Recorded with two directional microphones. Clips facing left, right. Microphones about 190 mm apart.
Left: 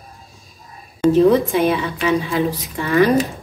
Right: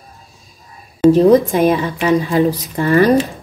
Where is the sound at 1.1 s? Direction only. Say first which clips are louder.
Right 2 dB; 45° right (ahead or behind).